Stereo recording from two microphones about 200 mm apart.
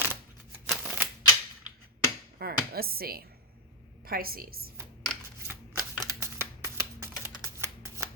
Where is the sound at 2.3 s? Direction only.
50° right (ahead or behind).